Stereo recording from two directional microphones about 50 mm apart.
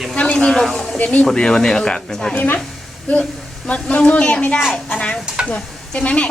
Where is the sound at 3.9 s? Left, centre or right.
Left.